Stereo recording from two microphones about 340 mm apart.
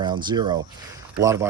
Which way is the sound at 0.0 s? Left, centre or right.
Centre.